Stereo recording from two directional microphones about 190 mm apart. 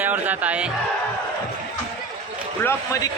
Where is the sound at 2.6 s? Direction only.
15° left (ahead or behind).